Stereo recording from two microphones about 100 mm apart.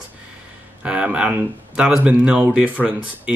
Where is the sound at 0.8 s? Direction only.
10° right (ahead or behind).